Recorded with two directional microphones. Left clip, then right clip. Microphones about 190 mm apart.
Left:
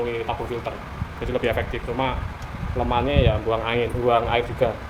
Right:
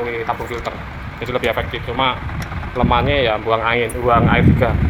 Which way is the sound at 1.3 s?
15° right (ahead or behind).